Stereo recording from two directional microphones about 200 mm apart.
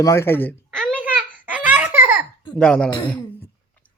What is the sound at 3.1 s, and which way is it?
Throat clearing, 10° left (ahead or behind).